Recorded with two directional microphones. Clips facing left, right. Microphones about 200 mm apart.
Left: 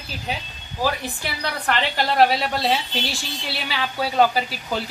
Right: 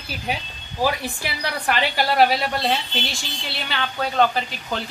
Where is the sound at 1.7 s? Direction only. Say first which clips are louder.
Right 1 dB; 5° right (ahead or behind).